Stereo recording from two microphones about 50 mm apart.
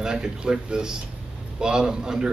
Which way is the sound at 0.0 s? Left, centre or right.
Centre.